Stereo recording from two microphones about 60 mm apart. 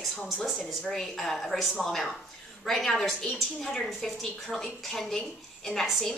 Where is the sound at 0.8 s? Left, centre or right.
Centre.